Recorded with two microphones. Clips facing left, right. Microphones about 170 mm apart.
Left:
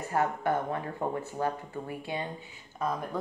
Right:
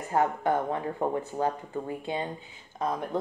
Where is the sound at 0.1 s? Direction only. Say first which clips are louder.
Right 3 dB; 20° right (ahead or behind).